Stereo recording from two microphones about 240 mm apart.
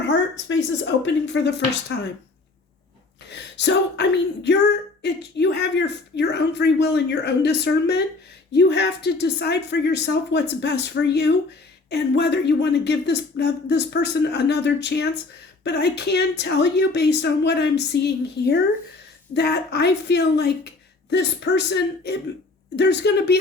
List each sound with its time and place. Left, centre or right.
0.1 s a sound: left
1.0 s speech: left
3.2 s speech: left
5.0 s speech: left